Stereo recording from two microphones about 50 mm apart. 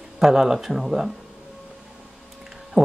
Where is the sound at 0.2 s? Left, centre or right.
Centre.